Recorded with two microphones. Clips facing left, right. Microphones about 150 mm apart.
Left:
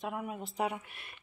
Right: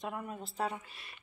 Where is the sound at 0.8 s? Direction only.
60° left (ahead or behind).